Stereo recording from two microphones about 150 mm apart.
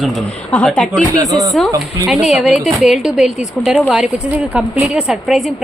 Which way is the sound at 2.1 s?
Centre (ahead or behind).